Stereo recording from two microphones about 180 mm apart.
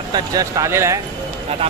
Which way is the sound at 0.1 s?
20° right (ahead or behind).